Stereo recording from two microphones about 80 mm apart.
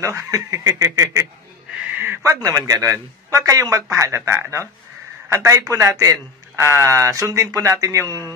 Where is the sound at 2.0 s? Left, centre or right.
Right.